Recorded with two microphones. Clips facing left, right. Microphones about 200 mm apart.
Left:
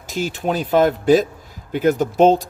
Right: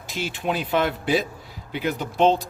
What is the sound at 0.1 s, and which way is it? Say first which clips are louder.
Speech: left 5 dB; 40° left (ahead or behind).